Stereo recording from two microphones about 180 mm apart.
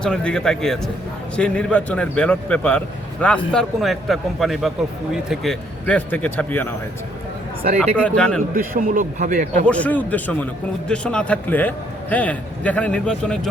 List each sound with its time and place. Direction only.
0.0 s a man's voice: 5° left (ahead or behind)
8.0 s a man's voice: 5° left (ahead or behind)
8.5 s a man's voice: 45° right (ahead or behind)
9.6 s a man's voice: 5° left (ahead or behind)